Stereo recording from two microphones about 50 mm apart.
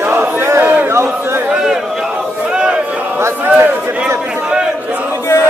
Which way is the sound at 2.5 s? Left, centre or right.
Right.